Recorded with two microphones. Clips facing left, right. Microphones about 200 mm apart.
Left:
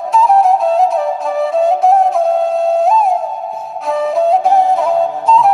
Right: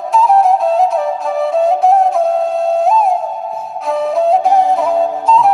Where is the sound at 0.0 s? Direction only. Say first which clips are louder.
Even; centre (ahead or behind).